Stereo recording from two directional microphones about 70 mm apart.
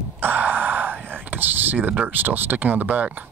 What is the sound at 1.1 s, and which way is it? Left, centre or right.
Speech, right.